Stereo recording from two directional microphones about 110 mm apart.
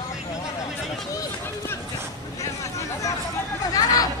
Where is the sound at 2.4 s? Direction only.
30° left (ahead or behind).